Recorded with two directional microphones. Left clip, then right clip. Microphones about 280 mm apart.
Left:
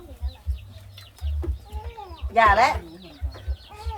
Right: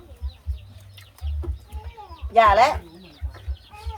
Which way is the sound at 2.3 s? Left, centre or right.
Right.